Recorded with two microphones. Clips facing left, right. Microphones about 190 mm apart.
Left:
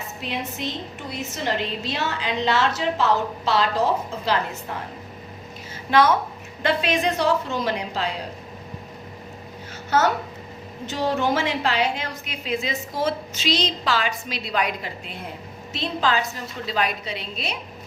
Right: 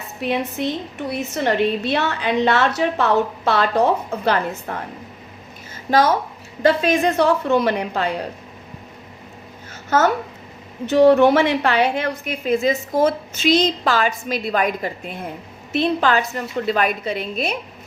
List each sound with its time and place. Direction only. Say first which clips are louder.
0.2 s a woman's voice: right 8 dB; 60° right (ahead or behind)
5.9 s a woman's voice: right 2 dB; 40° right (ahead or behind); by 8.1 s 55° right (ahead or behind)
9.9 s a woman's voice: right 3 dB; 50° right (ahead or behind)
10.8 s a woman's voice: right 11 dB; 60° right (ahead or behind)
15.7 s a woman's voice: right 6 dB; 60° right (ahead or behind)